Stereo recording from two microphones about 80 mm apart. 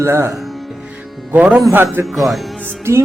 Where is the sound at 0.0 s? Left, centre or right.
Right.